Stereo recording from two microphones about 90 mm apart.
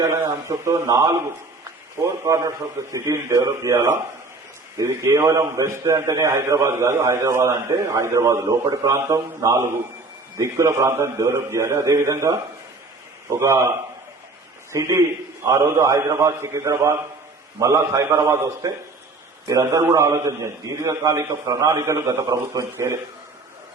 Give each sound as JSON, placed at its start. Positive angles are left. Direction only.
{"t": 0.0, "sound": "a man's voice", "side_deg": -30}
{"t": 8.6, "sound": "a man's voice", "side_deg": -45}
{"t": 13.4, "sound": "a man's voice", "side_deg": -30}